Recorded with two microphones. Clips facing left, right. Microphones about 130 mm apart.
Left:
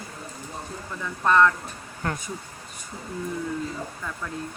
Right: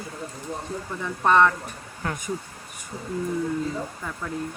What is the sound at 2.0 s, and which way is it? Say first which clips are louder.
Speech: left 1 dB; 5° right (ahead or behind).